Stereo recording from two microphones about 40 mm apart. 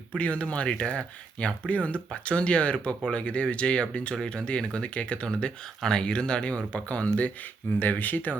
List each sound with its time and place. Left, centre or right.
0.1 s speech: left
7.8 s speech: left